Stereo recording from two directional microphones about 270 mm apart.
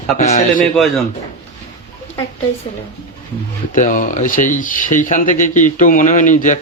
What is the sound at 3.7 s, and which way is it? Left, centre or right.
Speech, left.